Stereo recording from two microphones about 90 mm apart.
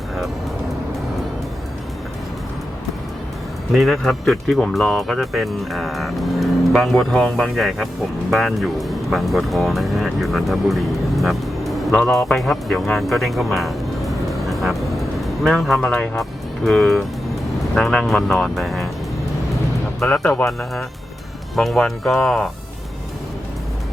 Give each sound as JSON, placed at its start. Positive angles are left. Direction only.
{"t": 3.7, "sound": "speech", "side_deg": 0}
{"t": 15.8, "sound": "speech", "side_deg": 15}
{"t": 16.6, "sound": "speech", "side_deg": 0}
{"t": 20.0, "sound": "speech", "side_deg": 10}